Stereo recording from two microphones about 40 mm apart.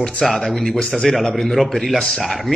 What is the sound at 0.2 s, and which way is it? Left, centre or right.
A man's voice, centre.